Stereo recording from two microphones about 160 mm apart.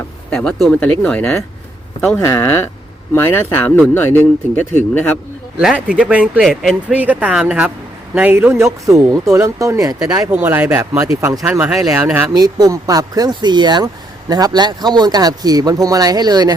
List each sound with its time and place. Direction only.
0.3 s speech: 5° left (ahead or behind)
5.5 s speech: 5° right (ahead or behind)
6.9 s speech: 10° right (ahead or behind)
11.3 s speech: 5° right (ahead or behind)
12.3 s speech: 25° right (ahead or behind)